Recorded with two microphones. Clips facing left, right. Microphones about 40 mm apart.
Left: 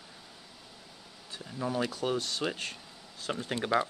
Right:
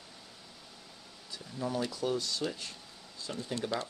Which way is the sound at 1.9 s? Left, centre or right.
Left.